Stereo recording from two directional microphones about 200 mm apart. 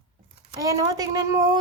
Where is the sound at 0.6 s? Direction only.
15° right (ahead or behind).